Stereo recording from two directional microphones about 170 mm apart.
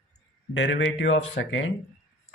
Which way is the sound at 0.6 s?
90° left.